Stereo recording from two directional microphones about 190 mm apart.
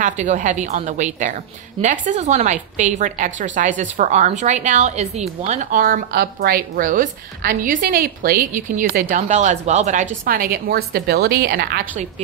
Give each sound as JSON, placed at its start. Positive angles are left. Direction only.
{"t": 0.0, "sound": "a woman's voice", "side_deg": -40}
{"t": 10.2, "sound": "a woman's voice", "side_deg": -50}